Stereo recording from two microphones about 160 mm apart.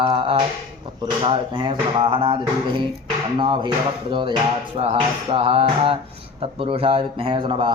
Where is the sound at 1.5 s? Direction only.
30° right (ahead or behind).